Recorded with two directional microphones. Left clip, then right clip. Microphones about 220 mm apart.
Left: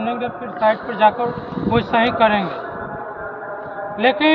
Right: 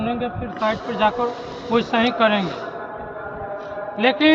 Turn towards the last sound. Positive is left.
turn(degrees=-25)  # may be behind; listen again after turning